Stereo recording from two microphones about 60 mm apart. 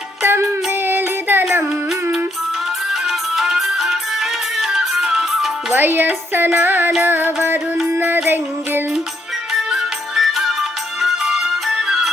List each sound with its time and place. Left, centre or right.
0.2 s music: right
2.9 s music: centre
5.7 s music: right
9.5 s music: centre